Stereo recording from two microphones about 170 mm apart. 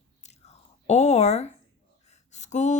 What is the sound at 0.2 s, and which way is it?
Chewing, 40° left (ahead or behind).